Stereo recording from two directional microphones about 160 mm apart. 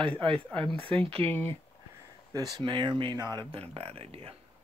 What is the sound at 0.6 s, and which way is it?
Speech, 35° right (ahead or behind).